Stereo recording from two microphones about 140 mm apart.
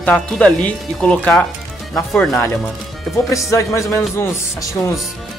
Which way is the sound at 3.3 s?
20° left (ahead or behind).